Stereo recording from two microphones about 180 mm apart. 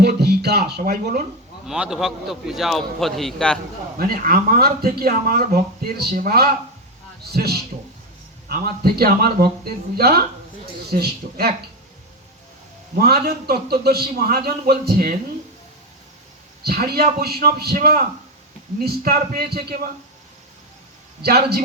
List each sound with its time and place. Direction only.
0.0 s speech: 65° right (ahead or behind)
1.6 s a man's voice: 5° right (ahead or behind)
3.9 s speech: 55° right (ahead or behind)
13.0 s speech: 60° right (ahead or behind)
16.6 s speech: 60° right (ahead or behind)
21.2 s speech: 60° right (ahead or behind)